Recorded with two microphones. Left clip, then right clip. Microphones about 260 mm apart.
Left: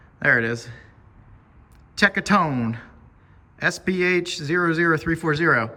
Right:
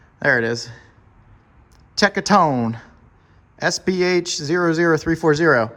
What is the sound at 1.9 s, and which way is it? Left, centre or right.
Speech, centre.